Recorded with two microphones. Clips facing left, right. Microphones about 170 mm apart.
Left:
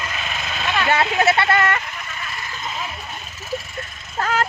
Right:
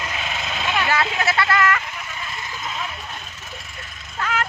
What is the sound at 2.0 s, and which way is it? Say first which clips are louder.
Vehicle: even; 15° right (ahead or behind).